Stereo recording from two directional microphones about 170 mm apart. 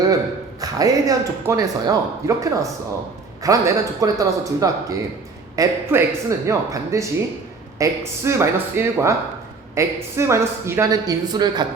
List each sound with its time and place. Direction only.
0.6 s speech: 20° right (ahead or behind)